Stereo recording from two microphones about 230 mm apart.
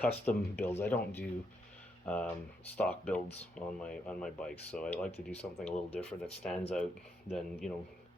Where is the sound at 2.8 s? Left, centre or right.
Centre.